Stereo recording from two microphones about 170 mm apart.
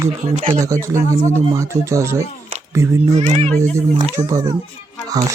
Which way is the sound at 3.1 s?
40° right (ahead or behind).